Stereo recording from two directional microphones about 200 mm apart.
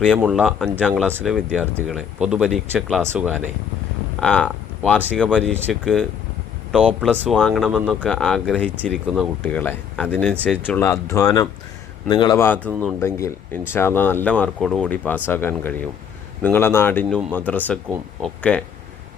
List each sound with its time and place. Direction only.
0.2 s speech: centre (ahead or behind)
4.2 s speech: 5° left (ahead or behind)